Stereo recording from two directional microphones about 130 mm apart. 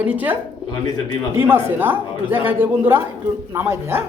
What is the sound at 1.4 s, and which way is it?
A man's voice, 15° right (ahead or behind).